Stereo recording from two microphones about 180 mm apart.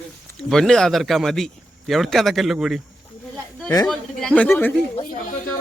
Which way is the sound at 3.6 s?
15° left (ahead or behind).